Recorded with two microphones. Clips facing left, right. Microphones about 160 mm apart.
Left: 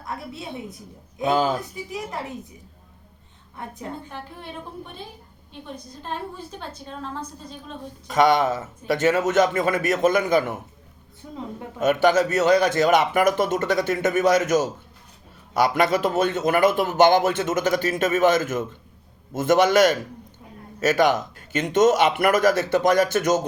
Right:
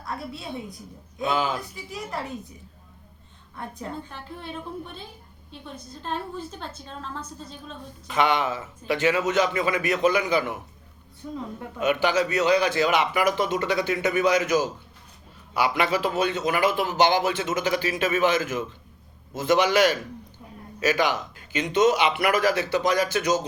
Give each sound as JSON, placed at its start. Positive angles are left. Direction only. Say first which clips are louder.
{"t": 1.3, "sound": "speech", "louder": "left 5 dB", "side_deg": 40}
{"t": 1.9, "sound": "speech", "louder": "even", "side_deg": 20}
{"t": 8.0, "sound": "speech", "louder": "left 5 dB", "side_deg": 40}
{"t": 11.8, "sound": "speech", "louder": "left 4 dB", "side_deg": 45}